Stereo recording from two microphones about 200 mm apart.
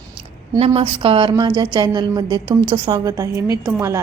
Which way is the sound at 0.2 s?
30° right (ahead or behind).